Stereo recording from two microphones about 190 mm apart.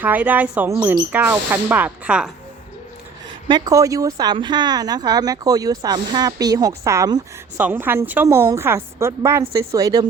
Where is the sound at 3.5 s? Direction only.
20° right (ahead or behind).